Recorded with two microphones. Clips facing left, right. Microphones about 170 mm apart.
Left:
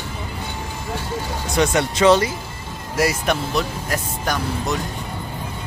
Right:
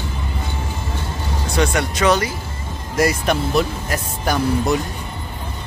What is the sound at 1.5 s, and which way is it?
Speech, 25° left (ahead or behind).